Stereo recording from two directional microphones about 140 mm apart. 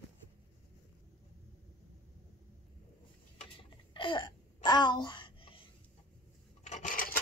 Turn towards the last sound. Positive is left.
turn(degrees=85)